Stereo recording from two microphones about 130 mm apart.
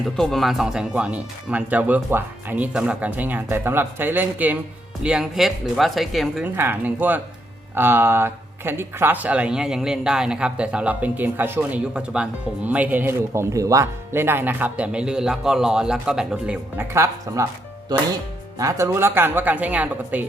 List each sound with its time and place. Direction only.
0.0 s speech: centre (ahead or behind)
6.4 s speech: 15° right (ahead or behind)
16.9 s speech: 25° right (ahead or behind)
18.6 s speech: 20° right (ahead or behind)